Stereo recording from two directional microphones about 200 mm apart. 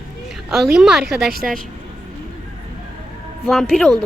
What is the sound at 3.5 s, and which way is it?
Speech, centre (ahead or behind).